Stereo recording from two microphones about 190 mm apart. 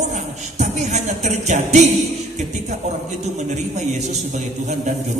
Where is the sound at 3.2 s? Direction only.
35° right (ahead or behind).